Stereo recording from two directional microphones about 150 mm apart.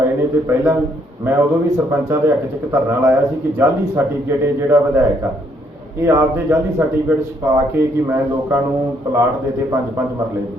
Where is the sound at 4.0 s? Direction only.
15° right (ahead or behind).